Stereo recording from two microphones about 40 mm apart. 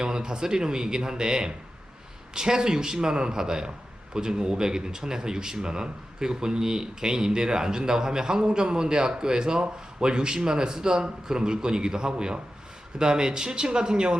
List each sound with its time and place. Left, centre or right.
0.0 s a man's voice: centre